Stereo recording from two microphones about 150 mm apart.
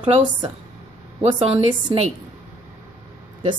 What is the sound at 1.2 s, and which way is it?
Speech, 40° right (ahead or behind).